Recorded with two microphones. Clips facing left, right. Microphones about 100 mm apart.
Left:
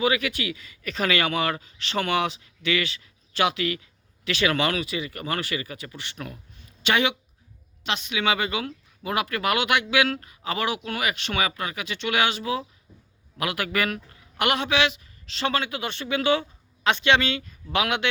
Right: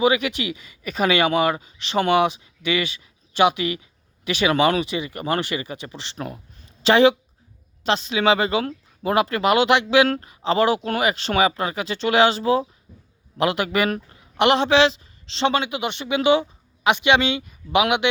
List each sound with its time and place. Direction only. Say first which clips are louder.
0.0 s speech: right 5 dB; 20° right (ahead or behind)